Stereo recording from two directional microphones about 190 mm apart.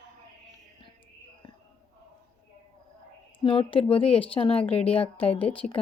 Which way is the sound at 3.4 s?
30° left (ahead or behind).